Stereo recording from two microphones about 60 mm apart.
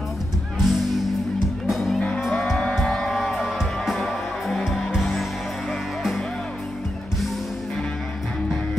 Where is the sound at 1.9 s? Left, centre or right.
Left.